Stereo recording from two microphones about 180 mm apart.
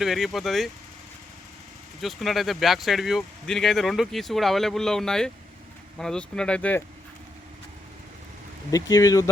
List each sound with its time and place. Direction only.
0.0 s speech: centre (ahead or behind)
2.0 s speech: centre (ahead or behind)
8.7 s speech: 20° left (ahead or behind)